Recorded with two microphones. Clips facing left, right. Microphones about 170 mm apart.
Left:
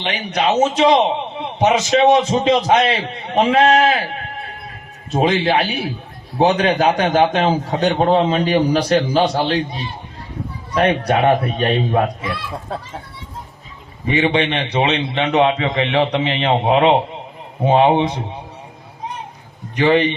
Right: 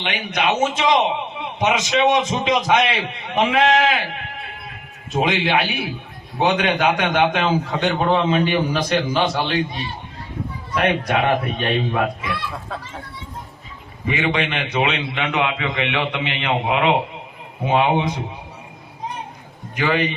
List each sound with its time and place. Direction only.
0.0 s a man's voice: 35° left (ahead or behind)
10.8 s a man's voice: 35° left (ahead or behind)
14.1 s a man's voice: 30° left (ahead or behind)
19.7 s a man's voice: 30° left (ahead or behind)